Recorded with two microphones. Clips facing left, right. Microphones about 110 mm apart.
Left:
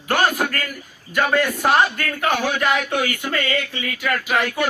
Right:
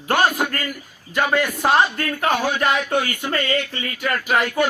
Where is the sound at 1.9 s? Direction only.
35° right (ahead or behind).